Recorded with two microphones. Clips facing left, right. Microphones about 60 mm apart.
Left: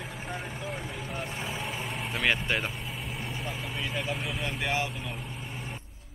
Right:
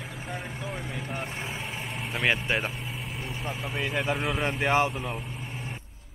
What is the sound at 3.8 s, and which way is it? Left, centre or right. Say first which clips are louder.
Speech: right 5 dB; right.